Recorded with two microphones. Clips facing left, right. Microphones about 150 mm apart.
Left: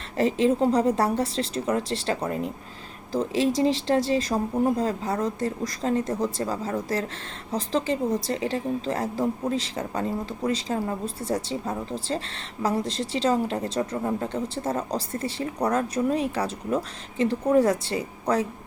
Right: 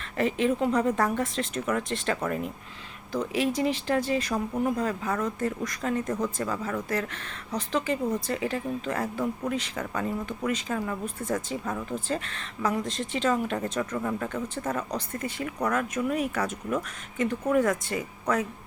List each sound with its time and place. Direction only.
0.2 s speech: 30° left (ahead or behind)